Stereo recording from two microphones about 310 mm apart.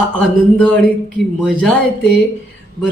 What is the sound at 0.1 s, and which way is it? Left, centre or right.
Speech, centre.